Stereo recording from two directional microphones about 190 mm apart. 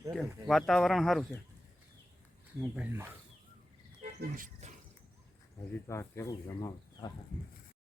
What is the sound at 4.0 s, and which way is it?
Pig, 45° right (ahead or behind).